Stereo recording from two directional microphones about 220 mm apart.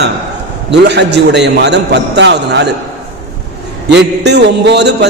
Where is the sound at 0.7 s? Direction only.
50° right (ahead or behind).